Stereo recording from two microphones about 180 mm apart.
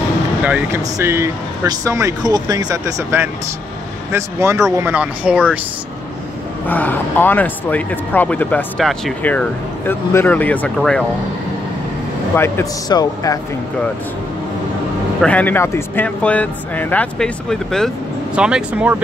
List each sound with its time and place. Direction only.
0.4 s speech: 10° right (ahead or behind)
6.7 s speech: 10° left (ahead or behind)
12.4 s a man's voice: 15° left (ahead or behind)
15.2 s speech: 10° left (ahead or behind); by 18.9 s 5° right (ahead or behind)